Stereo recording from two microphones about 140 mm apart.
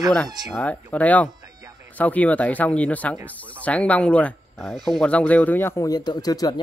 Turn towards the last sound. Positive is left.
turn(degrees=25)  # may be behind; listen again after turning